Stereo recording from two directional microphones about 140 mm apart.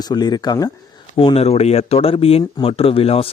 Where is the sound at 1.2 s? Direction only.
45° left (ahead or behind).